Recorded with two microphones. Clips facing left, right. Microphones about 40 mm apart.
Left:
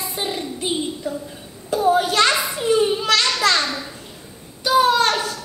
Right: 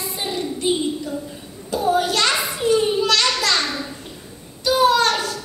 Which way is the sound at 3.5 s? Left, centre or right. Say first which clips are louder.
Left 1 dB; centre.